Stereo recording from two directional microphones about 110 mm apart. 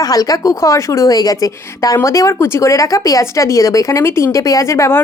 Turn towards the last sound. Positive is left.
turn(degrees=25)  # may be behind; listen again after turning